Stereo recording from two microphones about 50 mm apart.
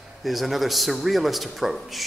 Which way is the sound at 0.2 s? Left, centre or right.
Centre.